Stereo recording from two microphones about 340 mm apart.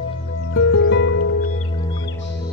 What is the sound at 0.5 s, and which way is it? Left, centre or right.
Music, left.